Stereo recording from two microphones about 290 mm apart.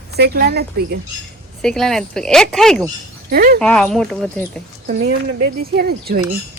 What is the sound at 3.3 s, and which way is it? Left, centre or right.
Speech, right.